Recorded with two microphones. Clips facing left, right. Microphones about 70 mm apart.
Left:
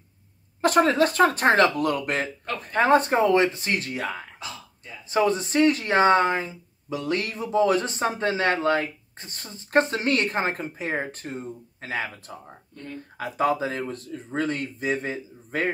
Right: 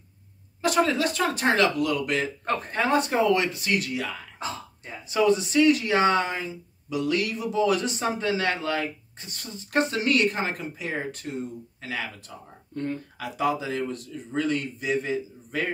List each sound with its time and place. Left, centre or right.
0.6 s speech: left
4.4 s throat clearing: right
5.0 s speech: left